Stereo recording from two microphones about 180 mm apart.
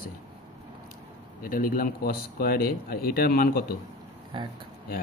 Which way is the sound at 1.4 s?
50° left (ahead or behind).